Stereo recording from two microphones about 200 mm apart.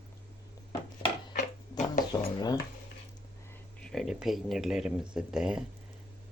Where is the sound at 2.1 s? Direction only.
20° left (ahead or behind).